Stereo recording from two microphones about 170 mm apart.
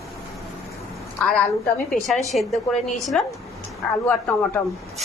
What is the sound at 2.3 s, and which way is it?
A woman's voice, centre (ahead or behind).